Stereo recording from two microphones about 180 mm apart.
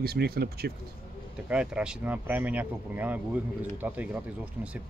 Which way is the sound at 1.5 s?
5° right (ahead or behind).